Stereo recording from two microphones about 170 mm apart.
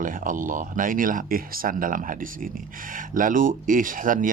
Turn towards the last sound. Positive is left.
turn(degrees=-50)  # may be behind; listen again after turning